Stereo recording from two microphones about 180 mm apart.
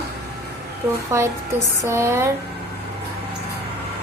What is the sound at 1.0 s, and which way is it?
Speech, 15° right (ahead or behind).